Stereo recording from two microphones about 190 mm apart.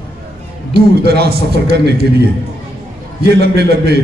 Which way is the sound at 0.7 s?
55° right (ahead or behind).